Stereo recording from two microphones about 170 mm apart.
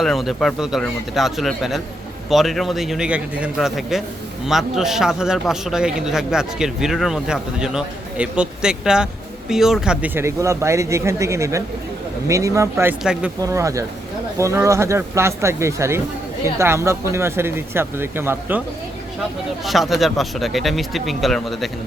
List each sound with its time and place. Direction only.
0.0 s a man's voice: centre (ahead or behind)
13.4 s speech: 20° right (ahead or behind)
19.6 s a man's voice: centre (ahead or behind)